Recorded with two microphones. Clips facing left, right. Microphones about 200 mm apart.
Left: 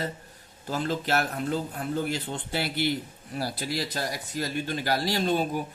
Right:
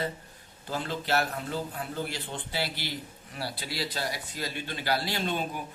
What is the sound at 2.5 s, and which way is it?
A man's voice, 55° left (ahead or behind).